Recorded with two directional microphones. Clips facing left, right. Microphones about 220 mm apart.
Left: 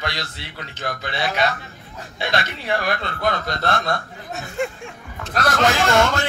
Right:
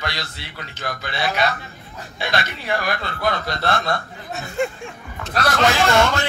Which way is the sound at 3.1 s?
50° left (ahead or behind).